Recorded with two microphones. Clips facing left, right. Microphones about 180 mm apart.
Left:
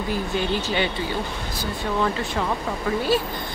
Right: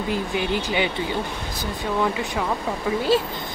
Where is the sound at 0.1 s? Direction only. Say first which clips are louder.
Even; 15° right (ahead or behind).